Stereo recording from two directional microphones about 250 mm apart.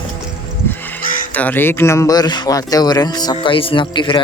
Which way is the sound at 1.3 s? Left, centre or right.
Centre.